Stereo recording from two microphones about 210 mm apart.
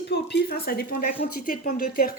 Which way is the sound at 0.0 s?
55° left (ahead or behind).